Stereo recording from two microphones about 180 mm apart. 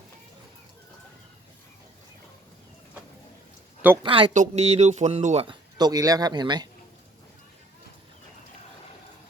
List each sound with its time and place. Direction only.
4.0 s speech: 30° right (ahead or behind)